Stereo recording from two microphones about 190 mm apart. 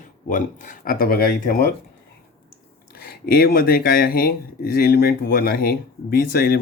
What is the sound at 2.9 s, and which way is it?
Speech, 50° left (ahead or behind).